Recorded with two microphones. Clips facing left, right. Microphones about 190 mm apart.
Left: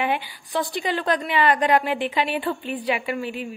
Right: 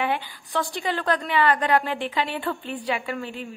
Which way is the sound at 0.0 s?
15° left (ahead or behind).